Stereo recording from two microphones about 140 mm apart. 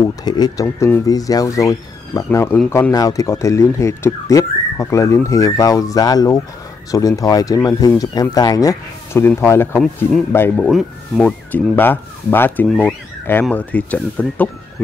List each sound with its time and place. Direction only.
0.2 s speech: 30° left (ahead or behind)
2.2 s speech: 15° left (ahead or behind)
2.9 s speech: 25° left (ahead or behind)
10.5 s speech: centre (ahead or behind)